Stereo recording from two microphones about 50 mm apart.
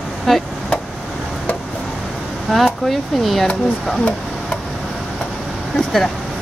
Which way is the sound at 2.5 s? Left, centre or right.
Centre.